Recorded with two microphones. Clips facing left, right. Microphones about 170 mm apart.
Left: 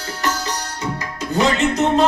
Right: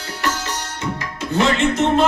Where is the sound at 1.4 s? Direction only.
40° left (ahead or behind).